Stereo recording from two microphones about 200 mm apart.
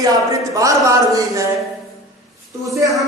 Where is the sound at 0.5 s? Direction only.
15° right (ahead or behind).